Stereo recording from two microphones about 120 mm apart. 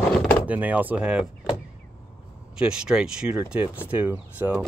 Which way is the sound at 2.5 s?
5° right (ahead or behind).